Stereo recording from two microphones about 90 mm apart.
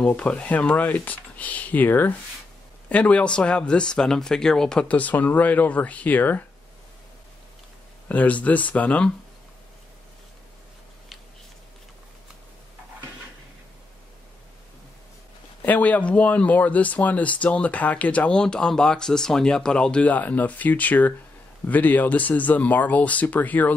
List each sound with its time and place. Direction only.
0.0 s speech: 15° left (ahead or behind)
8.1 s speech: 15° left (ahead or behind)
15.6 s speech: 15° left (ahead or behind)